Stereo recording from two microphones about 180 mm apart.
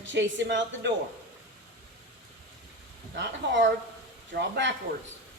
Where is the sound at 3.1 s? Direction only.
80° right.